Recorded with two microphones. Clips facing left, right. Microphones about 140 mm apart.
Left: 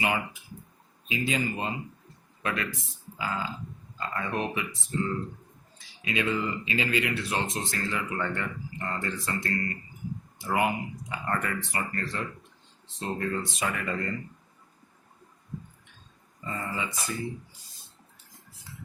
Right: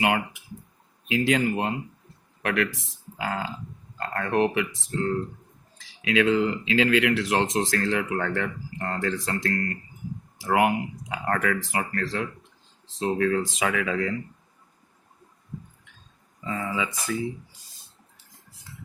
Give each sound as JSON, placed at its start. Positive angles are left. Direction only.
{"t": 0.0, "sound": "speech", "side_deg": -75}
{"t": 1.0, "sound": "speech", "side_deg": -85}
{"t": 2.4, "sound": "a man's voice", "side_deg": -85}
{"t": 4.9, "sound": "speech", "side_deg": -75}
{"t": 5.7, "sound": "speech", "side_deg": -90}
{"t": 16.4, "sound": "speech", "side_deg": -90}